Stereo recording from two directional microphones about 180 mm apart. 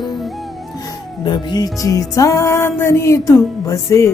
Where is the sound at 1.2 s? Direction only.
25° left (ahead or behind).